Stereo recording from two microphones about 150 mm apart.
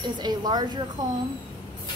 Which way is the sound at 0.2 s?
25° right (ahead or behind).